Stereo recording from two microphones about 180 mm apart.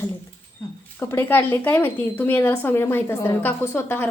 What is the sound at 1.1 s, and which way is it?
A woman's voice, 10° left (ahead or behind).